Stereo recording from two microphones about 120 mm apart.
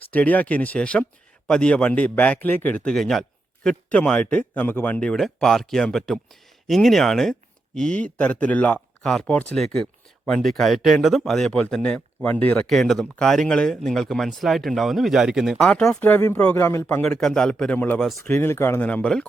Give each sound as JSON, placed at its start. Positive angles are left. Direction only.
{"t": 0.1, "sound": "speech", "side_deg": 15}
{"t": 12.6, "sound": "speech", "side_deg": 0}
{"t": 17.0, "sound": "speech", "side_deg": 5}